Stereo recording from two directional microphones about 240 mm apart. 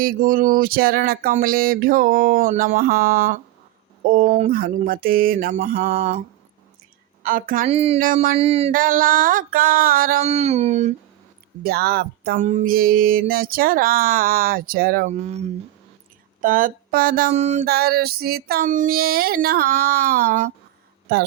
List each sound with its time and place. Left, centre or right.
0.0 s mantra: right
4.0 s speech: right
4.5 s mantra: right
11.6 s mantra: right